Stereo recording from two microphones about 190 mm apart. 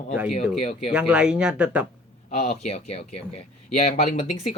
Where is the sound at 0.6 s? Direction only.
35° left (ahead or behind).